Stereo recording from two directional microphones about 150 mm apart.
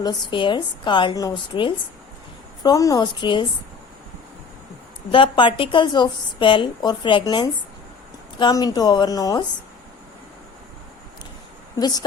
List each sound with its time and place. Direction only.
0.0 s a woman's voice: 30° left (ahead or behind)
5.1 s a woman's voice: 35° left (ahead or behind)
11.8 s a woman's voice: 25° left (ahead or behind)